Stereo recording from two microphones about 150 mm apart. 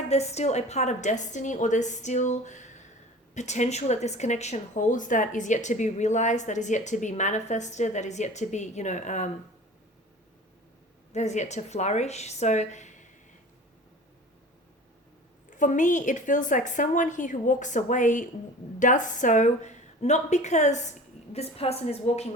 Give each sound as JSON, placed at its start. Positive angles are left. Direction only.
{"t": 0.1, "sound": "speech", "side_deg": 45}
{"t": 11.1, "sound": "speech", "side_deg": 50}
{"t": 15.4, "sound": "a woman's voice", "side_deg": 60}